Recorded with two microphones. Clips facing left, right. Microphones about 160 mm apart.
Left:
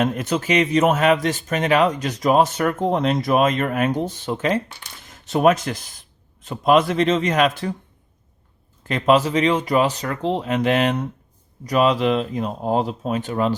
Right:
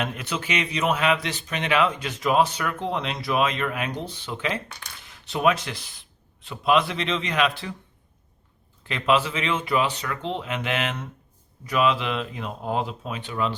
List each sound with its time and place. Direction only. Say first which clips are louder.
0.0 s speech: left 8 dB; 45° left (ahead or behind)
8.8 s speech: left 5 dB; 40° left (ahead or behind)